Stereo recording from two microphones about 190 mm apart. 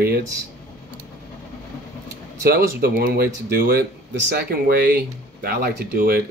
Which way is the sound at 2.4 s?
55° right (ahead or behind).